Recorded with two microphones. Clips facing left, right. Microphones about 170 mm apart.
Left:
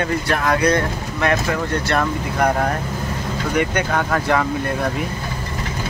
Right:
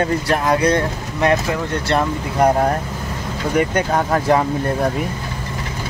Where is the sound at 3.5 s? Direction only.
40° right (ahead or behind).